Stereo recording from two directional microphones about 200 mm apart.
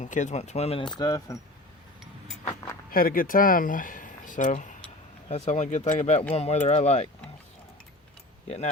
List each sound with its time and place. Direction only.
0.0 s speech: 35° left (ahead or behind)
0.9 s speech: 15° left (ahead or behind)
2.9 s speech: 45° left (ahead or behind)
8.4 s speech: 35° left (ahead or behind)